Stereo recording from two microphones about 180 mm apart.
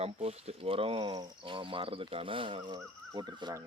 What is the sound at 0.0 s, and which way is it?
Speech, 35° right (ahead or behind).